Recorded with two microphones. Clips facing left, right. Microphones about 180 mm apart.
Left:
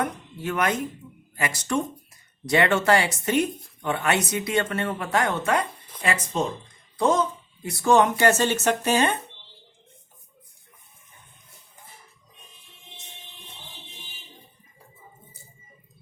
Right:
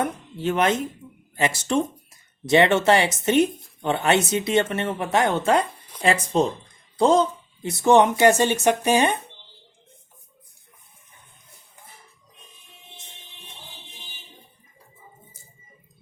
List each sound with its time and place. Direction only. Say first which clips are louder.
0.0 s speech: right 3 dB; 25° right (ahead or behind)